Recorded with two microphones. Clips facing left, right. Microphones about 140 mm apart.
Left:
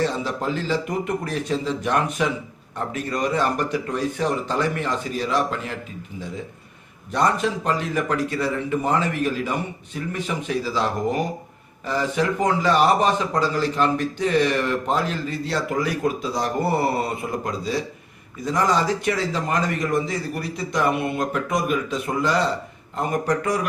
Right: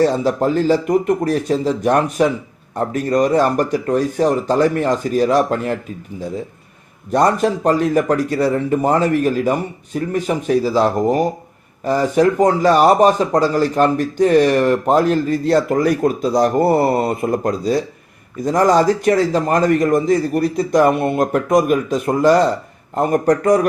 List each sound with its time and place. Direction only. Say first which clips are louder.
0.0 s a man's voice: right 9 dB; 40° right (ahead or behind)
7.1 s a man's voice: right 6 dB; 45° right (ahead or behind)